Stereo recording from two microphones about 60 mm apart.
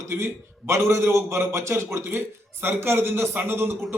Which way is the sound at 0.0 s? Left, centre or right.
Right.